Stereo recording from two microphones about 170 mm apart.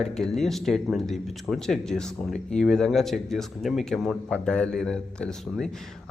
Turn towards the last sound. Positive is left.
turn(degrees=5)  # may be behind; listen again after turning